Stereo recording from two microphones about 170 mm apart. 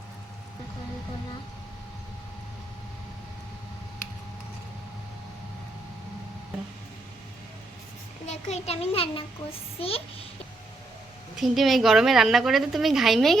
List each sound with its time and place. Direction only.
8.3 s a child's voice: 40° left (ahead or behind)
11.3 s a woman's voice: centre (ahead or behind)